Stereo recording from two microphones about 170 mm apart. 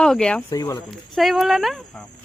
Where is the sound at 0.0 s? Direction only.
5° left (ahead or behind).